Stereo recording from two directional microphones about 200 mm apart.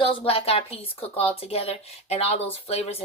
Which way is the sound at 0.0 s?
30° left (ahead or behind).